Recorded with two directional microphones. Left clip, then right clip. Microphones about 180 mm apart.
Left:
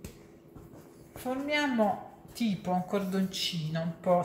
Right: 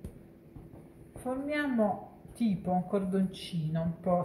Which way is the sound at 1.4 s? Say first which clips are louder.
Left 3 dB; 15° right (ahead or behind).